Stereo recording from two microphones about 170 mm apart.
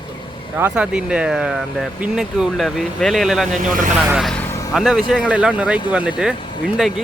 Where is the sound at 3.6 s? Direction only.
50° right (ahead or behind).